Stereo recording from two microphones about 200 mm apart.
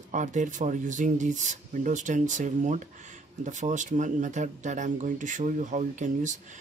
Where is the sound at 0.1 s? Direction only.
35° right (ahead or behind).